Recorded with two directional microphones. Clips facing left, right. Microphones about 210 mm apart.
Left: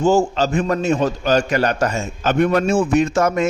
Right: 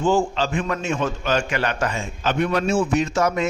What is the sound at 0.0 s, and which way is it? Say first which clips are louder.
A man's voice: left 4 dB; 40° left (ahead or behind).